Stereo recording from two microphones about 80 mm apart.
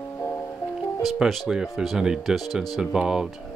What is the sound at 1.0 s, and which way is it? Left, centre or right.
Speech, centre.